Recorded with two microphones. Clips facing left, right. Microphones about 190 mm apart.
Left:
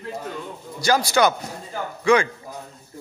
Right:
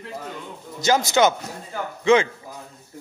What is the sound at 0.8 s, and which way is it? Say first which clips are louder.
Speech: right 1 dB; 20° right (ahead or behind).